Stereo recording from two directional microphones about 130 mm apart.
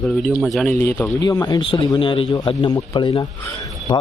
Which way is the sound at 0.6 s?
15° left (ahead or behind).